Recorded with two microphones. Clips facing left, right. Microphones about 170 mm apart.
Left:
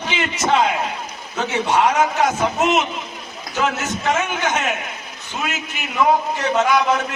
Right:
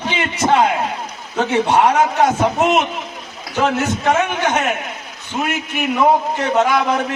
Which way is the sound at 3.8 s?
60° right (ahead or behind).